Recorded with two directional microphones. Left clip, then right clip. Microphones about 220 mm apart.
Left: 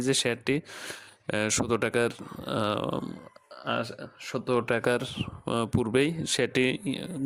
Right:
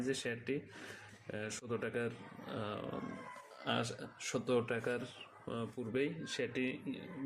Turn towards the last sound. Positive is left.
turn(degrees=55)  # may be behind; listen again after turning